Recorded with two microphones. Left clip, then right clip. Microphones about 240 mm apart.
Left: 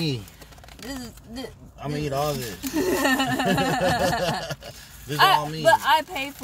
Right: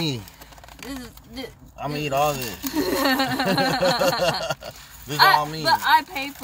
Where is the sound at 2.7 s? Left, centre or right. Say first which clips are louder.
Even; left.